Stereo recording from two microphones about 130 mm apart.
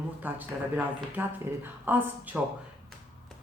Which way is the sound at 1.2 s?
15° right (ahead or behind).